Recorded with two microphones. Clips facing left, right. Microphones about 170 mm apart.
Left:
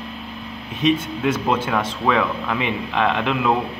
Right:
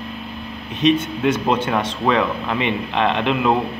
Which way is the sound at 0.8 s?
5° left (ahead or behind).